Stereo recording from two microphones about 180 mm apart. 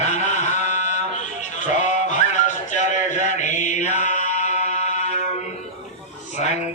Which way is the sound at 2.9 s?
40° left (ahead or behind).